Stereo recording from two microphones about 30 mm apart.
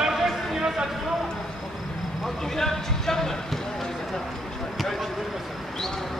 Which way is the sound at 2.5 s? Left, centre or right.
Centre.